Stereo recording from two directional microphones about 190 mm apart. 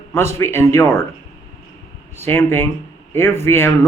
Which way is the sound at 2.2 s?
10° left (ahead or behind).